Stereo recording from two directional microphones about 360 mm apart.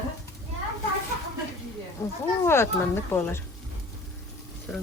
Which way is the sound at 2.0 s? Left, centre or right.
Centre.